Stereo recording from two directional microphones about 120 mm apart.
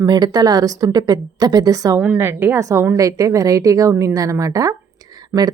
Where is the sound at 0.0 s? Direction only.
35° right (ahead or behind).